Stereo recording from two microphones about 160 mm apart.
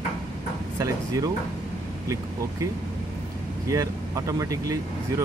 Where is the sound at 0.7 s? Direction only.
20° right (ahead or behind).